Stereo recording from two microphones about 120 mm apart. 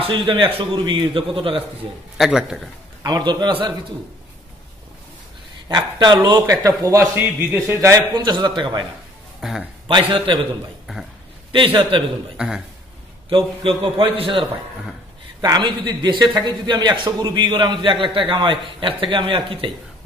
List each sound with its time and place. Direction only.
0.0 s a man's voice: 45° right (ahead or behind)
2.1 s a man's voice: 5° right (ahead or behind)
3.0 s a man's voice: 30° right (ahead or behind)
5.7 s a man's voice: 35° right (ahead or behind)
8.1 s a man's voice: 40° right (ahead or behind)
9.4 s speech: 5° right (ahead or behind)
9.8 s a man's voice: 45° right (ahead or behind)
11.5 s a man's voice: 45° right (ahead or behind)
12.4 s a man's voice: 5° right (ahead or behind)
13.3 s a man's voice: 45° right (ahead or behind)
15.4 s a man's voice: 35° right (ahead or behind)